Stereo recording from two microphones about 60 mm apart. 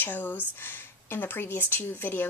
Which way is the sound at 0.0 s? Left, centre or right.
Left.